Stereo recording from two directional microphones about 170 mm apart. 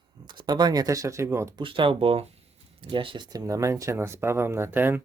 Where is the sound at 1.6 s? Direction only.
30° right (ahead or behind); by 5.0 s 15° right (ahead or behind).